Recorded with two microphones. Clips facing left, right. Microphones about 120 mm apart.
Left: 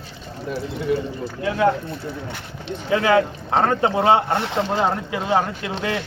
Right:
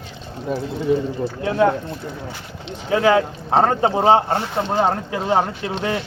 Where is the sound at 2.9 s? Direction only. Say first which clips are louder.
Right 1 dB; 25° right (ahead or behind).